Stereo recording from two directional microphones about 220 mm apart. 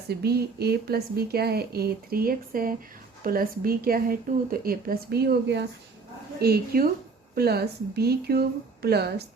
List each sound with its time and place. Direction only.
0.1 s a woman's voice: 45° right (ahead or behind)